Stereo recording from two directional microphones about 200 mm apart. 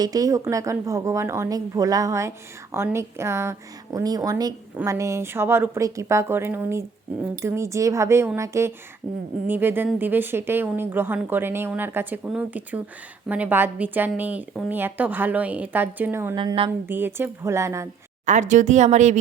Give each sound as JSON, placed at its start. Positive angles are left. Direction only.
{"t": 0.0, "sound": "speech", "side_deg": -20}
{"t": 16.3, "sound": "a woman's voice", "side_deg": -25}
{"t": 16.8, "sound": "speech", "side_deg": -10}
{"t": 18.3, "sound": "speech", "side_deg": -35}